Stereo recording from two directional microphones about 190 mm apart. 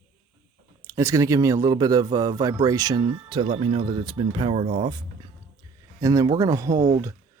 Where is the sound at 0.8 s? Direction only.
15° right (ahead or behind).